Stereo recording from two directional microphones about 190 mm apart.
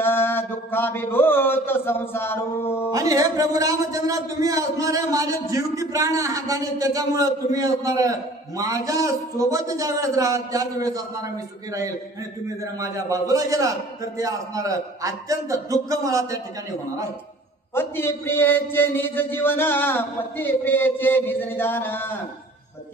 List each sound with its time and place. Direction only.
0.0 s a man's voice: 10° left (ahead or behind)
2.9 s a man's voice: 20° right (ahead or behind)
12.8 s a man's voice: 15° right (ahead or behind)
17.7 s a man's voice: 10° left (ahead or behind)